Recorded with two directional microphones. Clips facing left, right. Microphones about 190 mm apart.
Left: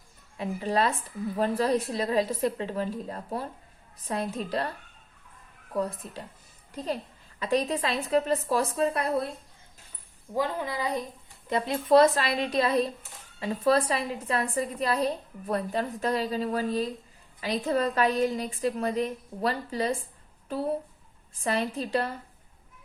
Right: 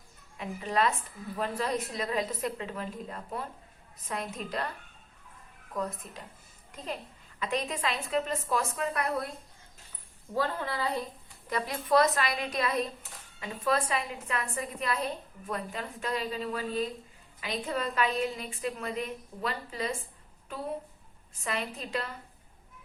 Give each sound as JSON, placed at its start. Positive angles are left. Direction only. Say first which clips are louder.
{"t": 0.3, "sound": "a woman's voice", "louder": "left 3 dB", "side_deg": 35}
{"t": 5.7, "sound": "a woman's voice", "louder": "left 5 dB", "side_deg": 30}
{"t": 7.3, "sound": "a woman's voice", "louder": "left 6 dB", "side_deg": 35}
{"t": 10.3, "sound": "a woman's voice", "louder": "left 2 dB", "side_deg": 15}
{"t": 21.4, "sound": "a woman's voice", "louder": "left 7 dB", "side_deg": 35}